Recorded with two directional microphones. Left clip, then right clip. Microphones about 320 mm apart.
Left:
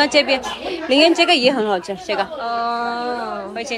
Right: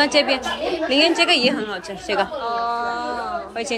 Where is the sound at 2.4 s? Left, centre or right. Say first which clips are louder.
Left 2 dB; left.